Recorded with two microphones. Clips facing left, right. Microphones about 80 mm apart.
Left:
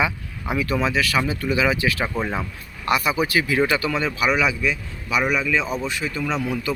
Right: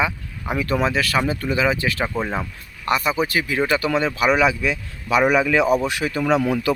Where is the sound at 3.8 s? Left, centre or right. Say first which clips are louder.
Right 3 dB; right.